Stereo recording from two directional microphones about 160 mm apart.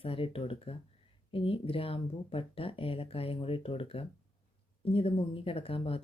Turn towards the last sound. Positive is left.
turn(degrees=35)  # may be behind; listen again after turning